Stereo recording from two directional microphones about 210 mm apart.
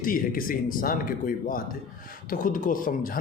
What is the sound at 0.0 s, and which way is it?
Speech, 40° left (ahead or behind).